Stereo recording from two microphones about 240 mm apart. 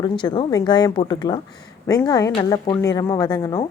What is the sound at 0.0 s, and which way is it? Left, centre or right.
Speech, centre.